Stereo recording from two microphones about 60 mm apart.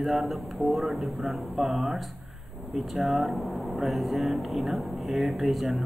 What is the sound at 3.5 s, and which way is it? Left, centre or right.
Speech, right.